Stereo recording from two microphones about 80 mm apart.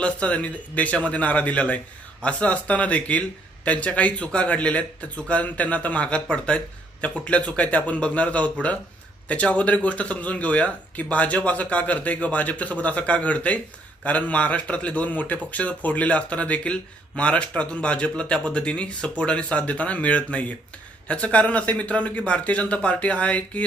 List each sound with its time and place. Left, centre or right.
0.0 s speech: centre